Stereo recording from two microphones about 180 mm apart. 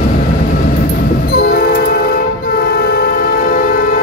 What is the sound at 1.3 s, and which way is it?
Train, 60° left (ahead or behind).